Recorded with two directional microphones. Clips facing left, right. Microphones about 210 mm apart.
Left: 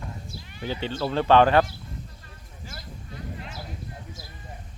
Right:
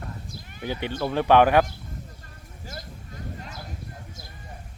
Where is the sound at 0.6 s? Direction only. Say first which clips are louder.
Even; 15° right (ahead or behind).